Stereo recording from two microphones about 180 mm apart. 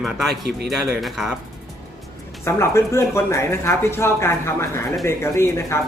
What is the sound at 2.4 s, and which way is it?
Speech, 15° left (ahead or behind).